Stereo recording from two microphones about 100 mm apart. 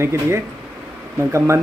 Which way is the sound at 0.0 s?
25° right (ahead or behind).